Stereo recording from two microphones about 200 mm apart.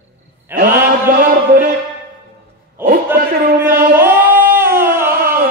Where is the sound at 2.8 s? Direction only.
10° right (ahead or behind).